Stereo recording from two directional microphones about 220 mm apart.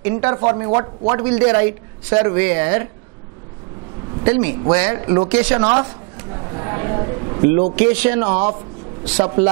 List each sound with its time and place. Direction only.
0.2 s speech: 20° right (ahead or behind)
4.2 s a man's voice: 20° right (ahead or behind)
5.7 s speech: 25° right (ahead or behind)
6.1 s a sound: 20° right (ahead or behind)
7.7 s speech: 10° right (ahead or behind)
8.2 s speech: 25° right (ahead or behind)